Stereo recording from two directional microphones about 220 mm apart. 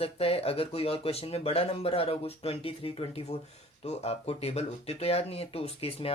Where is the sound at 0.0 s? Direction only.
25° left (ahead or behind).